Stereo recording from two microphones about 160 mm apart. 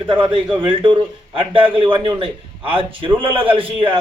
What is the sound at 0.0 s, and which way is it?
A man's voice, 35° right (ahead or behind).